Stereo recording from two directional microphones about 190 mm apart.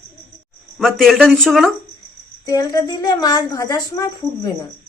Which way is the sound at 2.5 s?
20° left (ahead or behind).